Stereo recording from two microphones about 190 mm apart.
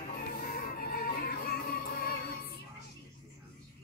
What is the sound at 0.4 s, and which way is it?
Music, 50° left (ahead or behind).